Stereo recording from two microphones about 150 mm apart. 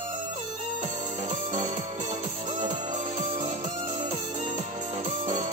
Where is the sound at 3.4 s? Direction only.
55° right (ahead or behind).